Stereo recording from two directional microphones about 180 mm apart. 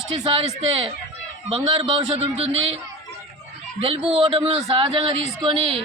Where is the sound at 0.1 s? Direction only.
30° right (ahead or behind).